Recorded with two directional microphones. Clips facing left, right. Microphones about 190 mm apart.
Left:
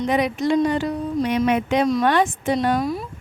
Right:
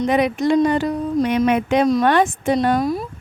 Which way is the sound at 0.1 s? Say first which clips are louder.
Right 2 dB; 55° right (ahead or behind).